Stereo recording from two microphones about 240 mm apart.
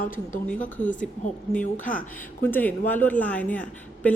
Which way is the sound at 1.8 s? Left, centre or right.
Left.